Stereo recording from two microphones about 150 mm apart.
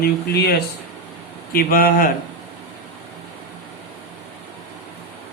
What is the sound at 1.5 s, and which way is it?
Speech, 75° left (ahead or behind).